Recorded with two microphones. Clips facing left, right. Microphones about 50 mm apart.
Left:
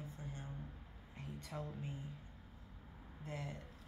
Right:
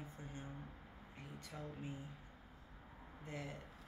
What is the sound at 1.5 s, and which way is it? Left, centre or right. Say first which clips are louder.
Speech: left 4 dB; centre.